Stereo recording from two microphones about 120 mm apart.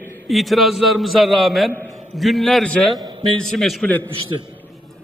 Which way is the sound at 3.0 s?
45° right (ahead or behind).